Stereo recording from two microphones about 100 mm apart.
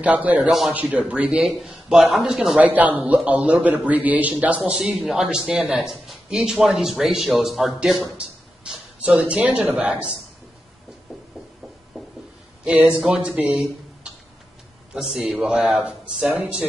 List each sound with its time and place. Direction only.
0.0 s speech: 15° right (ahead or behind)
0.5 s speech: 5° right (ahead or behind)
2.6 s speech: 15° right (ahead or behind)
8.2 s a sound: 10° right (ahead or behind)
9.0 s speech: 10° right (ahead or behind)
11.9 s a sound: 5° right (ahead or behind)
12.6 s speech: 10° right (ahead or behind)
13.4 s a sound: 15° right (ahead or behind)
15.0 s speech: 5° right (ahead or behind)